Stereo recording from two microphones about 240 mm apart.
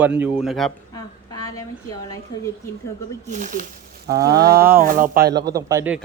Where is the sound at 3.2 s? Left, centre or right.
Right.